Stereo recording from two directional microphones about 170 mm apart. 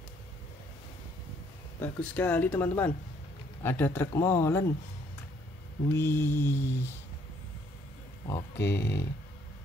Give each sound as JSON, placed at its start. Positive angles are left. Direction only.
{"t": 1.8, "sound": "speech", "side_deg": 10}
{"t": 5.9, "sound": "speech", "side_deg": 15}
{"t": 8.5, "sound": "speech", "side_deg": 85}